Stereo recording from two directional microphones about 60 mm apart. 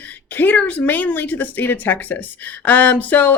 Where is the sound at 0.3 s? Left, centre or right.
Left.